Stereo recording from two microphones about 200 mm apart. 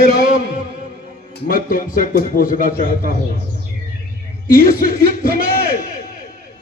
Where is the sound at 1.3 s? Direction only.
45° left (ahead or behind).